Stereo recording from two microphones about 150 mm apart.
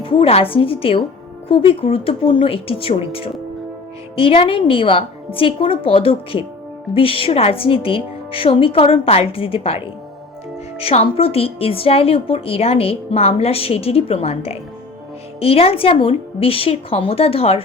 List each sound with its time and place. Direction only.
0.0 s speech: 40° left (ahead or behind)